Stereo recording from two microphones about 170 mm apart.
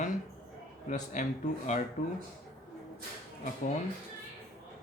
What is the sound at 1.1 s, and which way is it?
Speech, 45° left (ahead or behind).